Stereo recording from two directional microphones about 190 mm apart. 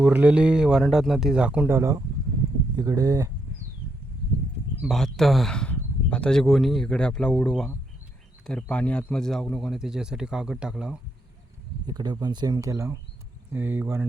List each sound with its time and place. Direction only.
0.0 s a man's voice: 10° right (ahead or behind)
4.8 s a man's voice: centre (ahead or behind)
11.9 s speech: 20° right (ahead or behind)